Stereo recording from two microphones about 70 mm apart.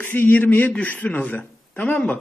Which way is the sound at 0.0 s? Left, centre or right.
Left.